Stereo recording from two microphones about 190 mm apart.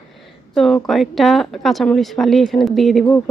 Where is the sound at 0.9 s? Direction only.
Centre (ahead or behind).